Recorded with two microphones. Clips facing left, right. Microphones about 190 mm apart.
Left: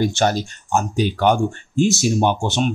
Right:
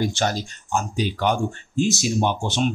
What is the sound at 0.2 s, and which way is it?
Speech, 55° left (ahead or behind).